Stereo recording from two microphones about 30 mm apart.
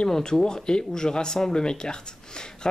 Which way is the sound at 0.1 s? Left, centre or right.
Left.